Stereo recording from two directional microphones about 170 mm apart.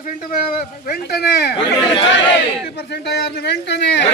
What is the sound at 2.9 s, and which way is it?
A man's voice, 80° left.